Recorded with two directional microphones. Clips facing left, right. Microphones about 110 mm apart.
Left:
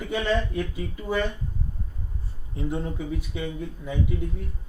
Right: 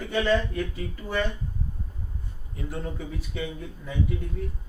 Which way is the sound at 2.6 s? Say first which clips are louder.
Left 6 dB; 20° left (ahead or behind).